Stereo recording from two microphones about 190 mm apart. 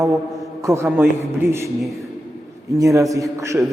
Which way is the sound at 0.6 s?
15° right (ahead or behind).